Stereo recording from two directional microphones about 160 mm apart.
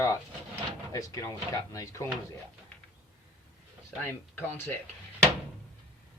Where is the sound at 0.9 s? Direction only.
20° left (ahead or behind).